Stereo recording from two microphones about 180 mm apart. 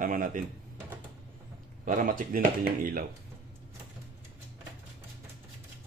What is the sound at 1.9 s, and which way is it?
A man's voice, 45° right (ahead or behind).